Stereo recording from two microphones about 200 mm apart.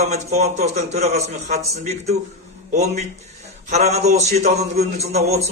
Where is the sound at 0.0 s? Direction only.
35° right (ahead or behind).